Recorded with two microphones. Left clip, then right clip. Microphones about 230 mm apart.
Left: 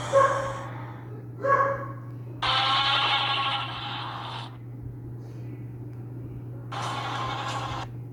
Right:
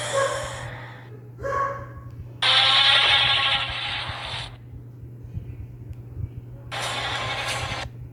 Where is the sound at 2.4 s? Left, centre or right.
Right.